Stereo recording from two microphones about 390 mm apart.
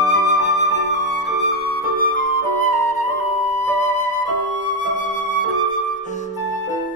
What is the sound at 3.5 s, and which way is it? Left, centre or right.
Flute, centre.